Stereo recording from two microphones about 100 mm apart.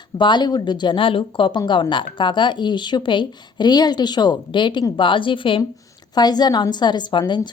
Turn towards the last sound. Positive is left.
turn(degrees=50)  # may be behind; listen again after turning